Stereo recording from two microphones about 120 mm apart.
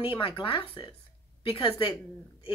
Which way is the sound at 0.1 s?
45° left (ahead or behind).